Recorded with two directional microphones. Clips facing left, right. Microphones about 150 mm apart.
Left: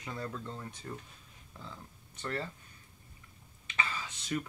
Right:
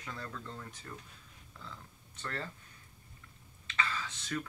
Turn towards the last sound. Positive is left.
turn(degrees=15)  # may be behind; listen again after turning